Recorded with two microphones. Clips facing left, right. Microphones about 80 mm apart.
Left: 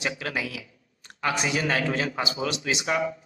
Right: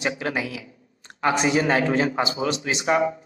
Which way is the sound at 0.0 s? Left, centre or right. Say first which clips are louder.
Right 4 dB; right.